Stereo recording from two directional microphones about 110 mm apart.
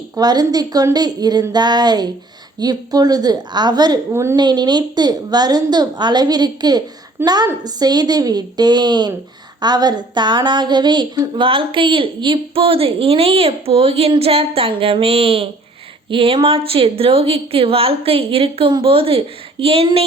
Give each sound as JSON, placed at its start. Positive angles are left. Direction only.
{"t": 0.2, "sound": "a woman's voice", "side_deg": -35}
{"t": 4.1, "sound": "a woman's voice", "side_deg": -25}
{"t": 4.4, "sound": "a woman's voice", "side_deg": -40}
{"t": 7.2, "sound": "a woman's voice", "side_deg": -20}
{"t": 7.6, "sound": "a woman's voice", "side_deg": -35}